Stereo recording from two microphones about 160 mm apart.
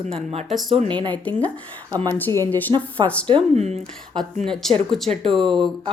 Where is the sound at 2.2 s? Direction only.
15° left (ahead or behind).